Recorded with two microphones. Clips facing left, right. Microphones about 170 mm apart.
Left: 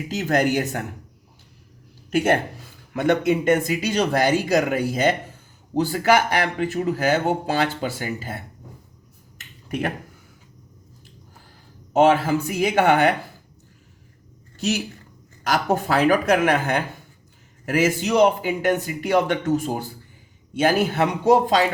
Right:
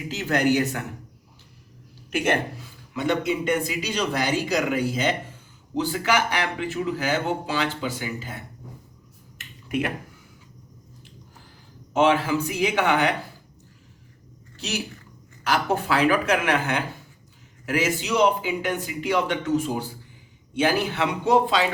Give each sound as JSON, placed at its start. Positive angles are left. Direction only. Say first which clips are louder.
{"t": 0.1, "sound": "speech", "louder": "left 1 dB", "side_deg": 45}
{"t": 2.1, "sound": "speech", "louder": "left 4 dB", "side_deg": 45}
{"t": 2.9, "sound": "speech", "louder": "left 5 dB", "side_deg": 55}
{"t": 9.6, "sound": "speech", "louder": "even", "side_deg": 40}
{"t": 11.9, "sound": "speech", "louder": "left 3 dB", "side_deg": 45}
{"t": 15.4, "sound": "speech", "louder": "left 2 dB", "side_deg": 45}